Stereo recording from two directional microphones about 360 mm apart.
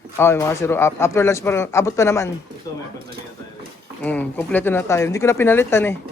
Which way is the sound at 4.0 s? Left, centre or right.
Centre.